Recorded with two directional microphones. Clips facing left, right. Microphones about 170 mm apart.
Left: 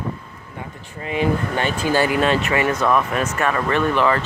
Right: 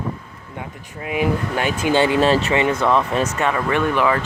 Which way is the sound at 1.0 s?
10° right (ahead or behind).